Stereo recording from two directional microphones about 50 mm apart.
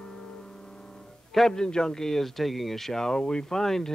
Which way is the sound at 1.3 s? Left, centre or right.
Centre.